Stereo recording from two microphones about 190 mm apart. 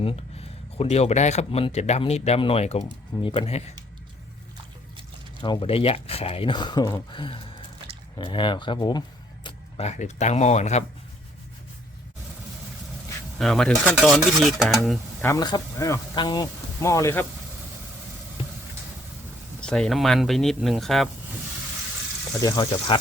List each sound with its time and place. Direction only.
0.8 s speech: 35° left (ahead or behind)
5.4 s speech: 25° left (ahead or behind)
13.4 s stir: centre (ahead or behind)
15.2 s speech: 15° left (ahead or behind)
19.6 s stir: centre (ahead or behind)
22.4 s speech: 20° left (ahead or behind)